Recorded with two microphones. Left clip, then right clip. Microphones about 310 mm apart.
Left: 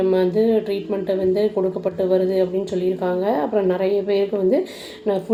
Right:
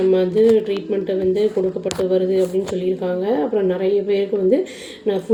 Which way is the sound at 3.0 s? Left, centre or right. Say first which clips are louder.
Even; left.